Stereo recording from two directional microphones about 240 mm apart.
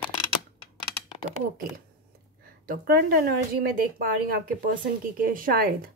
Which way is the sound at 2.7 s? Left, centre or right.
Right.